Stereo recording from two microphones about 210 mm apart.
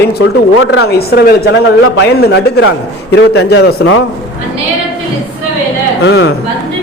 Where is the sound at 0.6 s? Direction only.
75° left (ahead or behind).